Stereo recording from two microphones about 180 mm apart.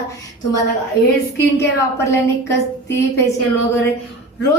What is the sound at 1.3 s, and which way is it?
A woman's voice, 15° left (ahead or behind).